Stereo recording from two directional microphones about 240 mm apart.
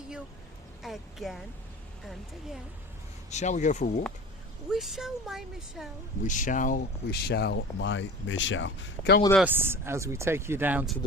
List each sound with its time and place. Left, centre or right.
0.8 s speech: centre
3.2 s speech: left
4.7 s speech: centre
6.2 s speech: left
9.3 s speech: centre